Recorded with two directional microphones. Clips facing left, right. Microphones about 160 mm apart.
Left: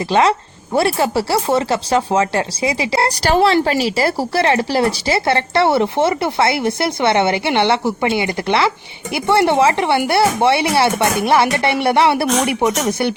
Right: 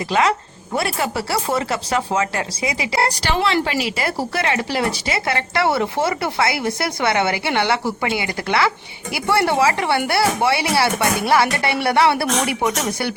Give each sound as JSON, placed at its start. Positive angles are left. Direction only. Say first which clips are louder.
{"t": 0.1, "sound": "speech", "louder": "left 4 dB", "side_deg": 30}